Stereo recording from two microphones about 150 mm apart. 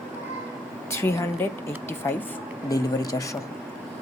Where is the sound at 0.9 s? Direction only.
15° left (ahead or behind).